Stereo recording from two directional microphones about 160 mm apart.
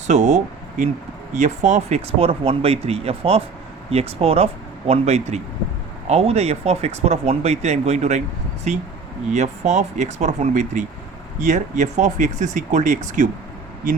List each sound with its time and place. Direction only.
0.1 s speech: 50° right (ahead or behind)
2.1 s speech: 35° right (ahead or behind)